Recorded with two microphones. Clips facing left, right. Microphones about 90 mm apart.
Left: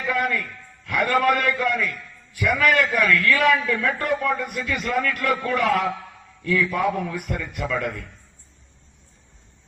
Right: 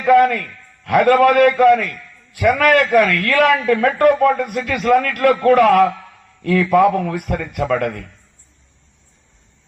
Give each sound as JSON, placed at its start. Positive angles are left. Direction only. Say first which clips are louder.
{"t": 0.0, "sound": "a man's voice", "louder": "right 12 dB", "side_deg": -55}